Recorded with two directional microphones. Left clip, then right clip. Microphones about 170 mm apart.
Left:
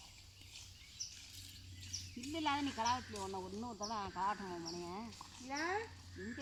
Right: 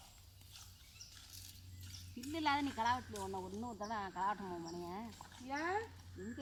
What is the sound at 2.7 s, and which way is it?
Speech, 10° left (ahead or behind).